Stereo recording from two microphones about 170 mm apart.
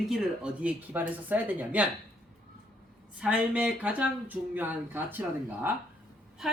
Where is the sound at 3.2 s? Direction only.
5° right (ahead or behind).